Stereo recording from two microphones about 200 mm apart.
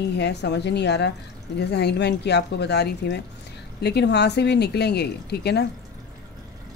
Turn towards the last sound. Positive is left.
turn(degrees=55)  # may be behind; listen again after turning